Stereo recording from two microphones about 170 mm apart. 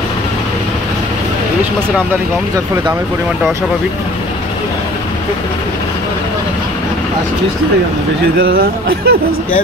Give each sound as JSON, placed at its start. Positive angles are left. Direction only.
{"t": 8.4, "sound": "speech", "side_deg": -60}